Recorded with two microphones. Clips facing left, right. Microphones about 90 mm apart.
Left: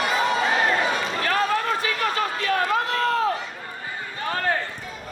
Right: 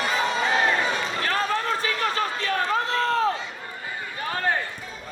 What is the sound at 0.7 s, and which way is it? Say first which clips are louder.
Run: left 2 dB; 30° right (ahead or behind).